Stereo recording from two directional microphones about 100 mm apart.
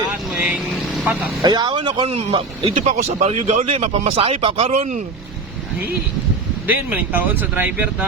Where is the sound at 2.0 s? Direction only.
85° right; by 2.7 s 70° right (ahead or behind).